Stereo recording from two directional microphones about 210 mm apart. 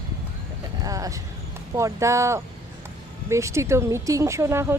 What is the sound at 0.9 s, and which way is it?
Vehicle, 15° right (ahead or behind).